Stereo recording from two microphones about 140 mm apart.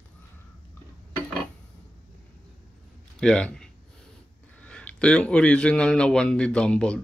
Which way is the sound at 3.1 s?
5° left (ahead or behind).